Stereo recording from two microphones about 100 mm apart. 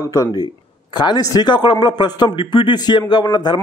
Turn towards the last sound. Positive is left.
turn(degrees=50)  # may be behind; listen again after turning